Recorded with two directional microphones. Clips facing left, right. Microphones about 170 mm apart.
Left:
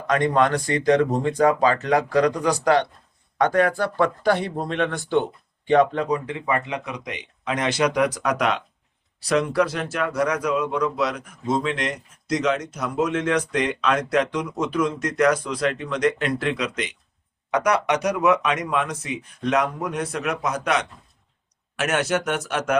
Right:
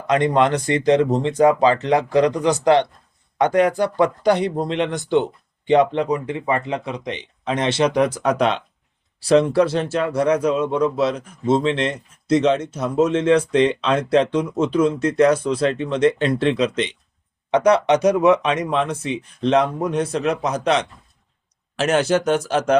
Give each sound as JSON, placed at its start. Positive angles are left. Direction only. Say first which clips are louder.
{"t": 0.1, "sound": "speech", "louder": "right 3 dB", "side_deg": -25}